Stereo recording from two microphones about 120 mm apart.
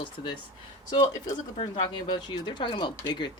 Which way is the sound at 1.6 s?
40° left (ahead or behind).